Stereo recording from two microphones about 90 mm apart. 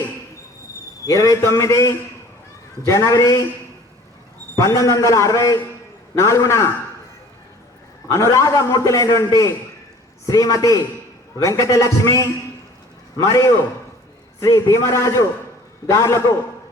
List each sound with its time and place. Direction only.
1.0 s a man's voice: 40° left (ahead or behind)
4.5 s a man's voice: 35° left (ahead or behind)
8.1 s a man's voice: 35° left (ahead or behind)
14.5 s a man's voice: 35° left (ahead or behind)